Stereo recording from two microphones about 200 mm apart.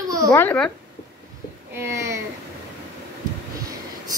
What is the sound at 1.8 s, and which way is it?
Speech, 15° right (ahead or behind).